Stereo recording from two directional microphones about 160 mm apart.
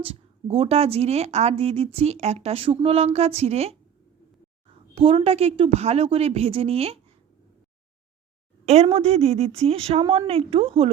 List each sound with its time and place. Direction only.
0.0 s a woman's voice: 35° right (ahead or behind)
4.9 s a woman's voice: 35° right (ahead or behind)
8.6 s a woman's voice: 45° right (ahead or behind)